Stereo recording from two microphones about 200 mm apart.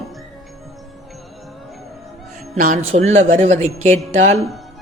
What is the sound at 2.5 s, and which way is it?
A man's voice, 40° right (ahead or behind).